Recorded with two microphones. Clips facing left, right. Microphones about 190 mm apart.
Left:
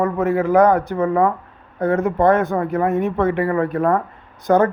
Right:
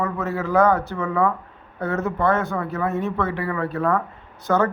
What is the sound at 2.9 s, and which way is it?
Speech, 15° left (ahead or behind).